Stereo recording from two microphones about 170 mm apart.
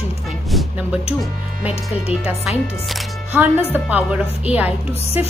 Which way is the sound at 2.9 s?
Centre (ahead or behind).